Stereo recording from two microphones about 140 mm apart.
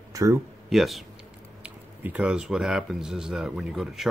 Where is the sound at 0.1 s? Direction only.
20° right (ahead or behind).